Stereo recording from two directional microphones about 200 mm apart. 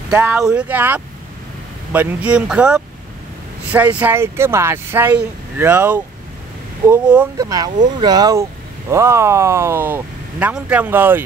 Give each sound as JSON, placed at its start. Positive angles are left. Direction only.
{"t": 0.1, "sound": "speech", "side_deg": -5}